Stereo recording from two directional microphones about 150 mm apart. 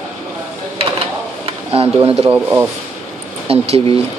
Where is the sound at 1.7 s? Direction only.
40° right (ahead or behind).